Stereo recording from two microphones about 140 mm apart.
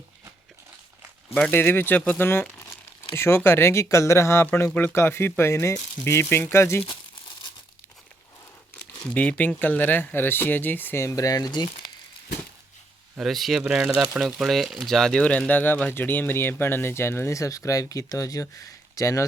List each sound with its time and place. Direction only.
1.3 s speech: 10° left (ahead or behind)
9.0 s speech: 10° left (ahead or behind); by 11.7 s 30° left (ahead or behind)
13.1 s speech: centre (ahead or behind); by 19.2 s 25° left (ahead or behind)